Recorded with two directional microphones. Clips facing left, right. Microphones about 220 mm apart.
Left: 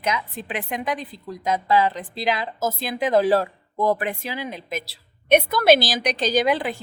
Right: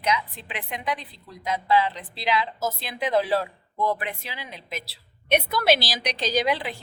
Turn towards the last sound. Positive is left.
turn(degrees=50)  # may be behind; listen again after turning